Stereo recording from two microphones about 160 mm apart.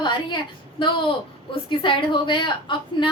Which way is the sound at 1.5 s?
30° left (ahead or behind).